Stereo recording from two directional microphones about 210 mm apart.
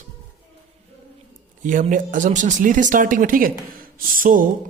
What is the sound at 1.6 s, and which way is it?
Speech, 40° right (ahead or behind).